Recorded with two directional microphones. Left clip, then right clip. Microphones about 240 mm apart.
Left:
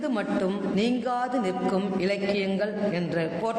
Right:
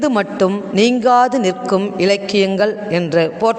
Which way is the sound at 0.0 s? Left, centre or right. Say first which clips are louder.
Right 12 dB; right.